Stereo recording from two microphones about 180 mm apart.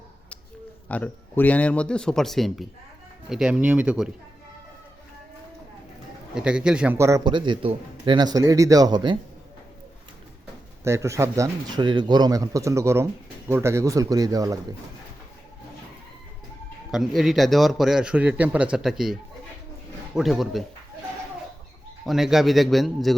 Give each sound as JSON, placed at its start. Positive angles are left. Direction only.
{"t": 0.9, "sound": "a man's voice", "side_deg": 10}
{"t": 6.3, "sound": "a man's voice", "side_deg": -5}
{"t": 7.3, "sound": "speech", "side_deg": -25}
{"t": 10.8, "sound": "a man's voice", "side_deg": -15}
{"t": 16.9, "sound": "a man's voice", "side_deg": 0}
{"t": 22.0, "sound": "a man's voice", "side_deg": 0}